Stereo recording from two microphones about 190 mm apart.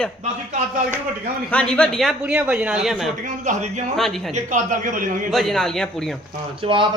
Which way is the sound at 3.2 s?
40° right (ahead or behind).